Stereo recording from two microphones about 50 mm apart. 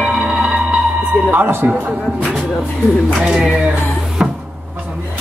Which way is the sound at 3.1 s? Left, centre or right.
Centre.